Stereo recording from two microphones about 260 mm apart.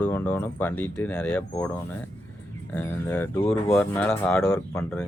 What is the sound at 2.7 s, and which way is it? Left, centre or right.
Speech, centre.